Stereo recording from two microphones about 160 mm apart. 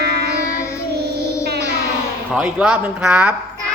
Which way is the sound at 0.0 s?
90° right.